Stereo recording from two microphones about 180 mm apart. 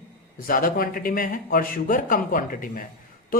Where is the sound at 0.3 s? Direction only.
50° left (ahead or behind).